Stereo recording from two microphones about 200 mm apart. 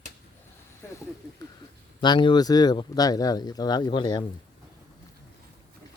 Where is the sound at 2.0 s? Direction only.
20° left (ahead or behind).